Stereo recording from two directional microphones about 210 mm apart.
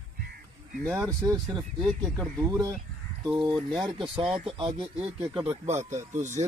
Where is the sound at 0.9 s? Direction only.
15° right (ahead or behind).